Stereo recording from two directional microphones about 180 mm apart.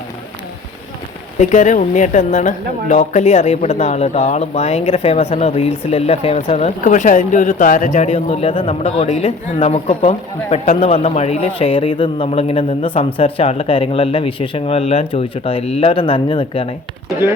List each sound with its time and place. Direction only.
1.4 s a woman's voice: 40° left (ahead or behind)